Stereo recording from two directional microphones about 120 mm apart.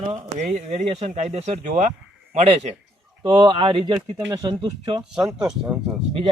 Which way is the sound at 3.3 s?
40° right (ahead or behind).